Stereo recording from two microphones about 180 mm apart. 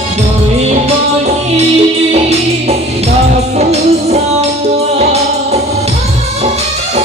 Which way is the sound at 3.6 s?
35° right (ahead or behind).